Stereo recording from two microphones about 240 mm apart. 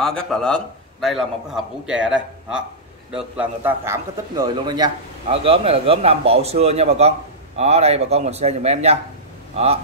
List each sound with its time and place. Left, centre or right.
0.0 s a man's voice: centre; by 9.7 s right